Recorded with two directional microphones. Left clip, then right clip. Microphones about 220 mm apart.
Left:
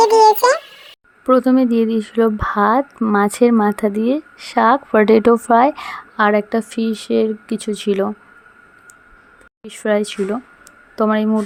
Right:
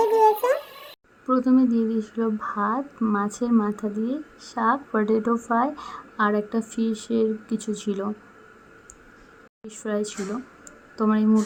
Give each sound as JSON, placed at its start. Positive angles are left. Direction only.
{"t": 0.0, "sound": "a sound", "side_deg": 35}
{"t": 1.3, "sound": "a woman's voice", "side_deg": 30}
{"t": 9.6, "sound": "a woman's voice", "side_deg": 30}